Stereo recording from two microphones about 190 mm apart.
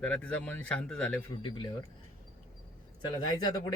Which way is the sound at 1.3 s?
25° left (ahead or behind).